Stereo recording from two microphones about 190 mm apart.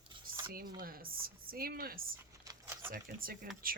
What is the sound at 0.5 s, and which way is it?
Speech, 50° right (ahead or behind).